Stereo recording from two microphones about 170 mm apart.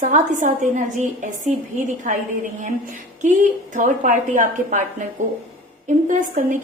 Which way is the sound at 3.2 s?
50° right (ahead or behind).